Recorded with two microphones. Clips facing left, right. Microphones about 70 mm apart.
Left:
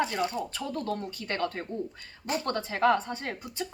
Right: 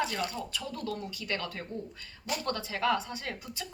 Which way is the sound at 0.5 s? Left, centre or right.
Left.